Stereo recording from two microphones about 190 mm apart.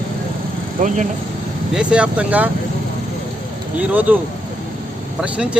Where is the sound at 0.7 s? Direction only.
40° right (ahead or behind).